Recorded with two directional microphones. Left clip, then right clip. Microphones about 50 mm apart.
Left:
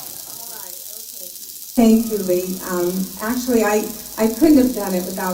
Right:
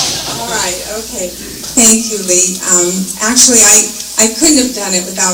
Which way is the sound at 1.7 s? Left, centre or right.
Centre.